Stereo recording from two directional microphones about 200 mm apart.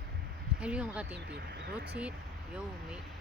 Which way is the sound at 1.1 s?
55° right (ahead or behind).